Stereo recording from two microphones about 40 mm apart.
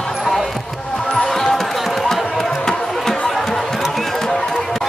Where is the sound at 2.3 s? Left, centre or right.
Centre.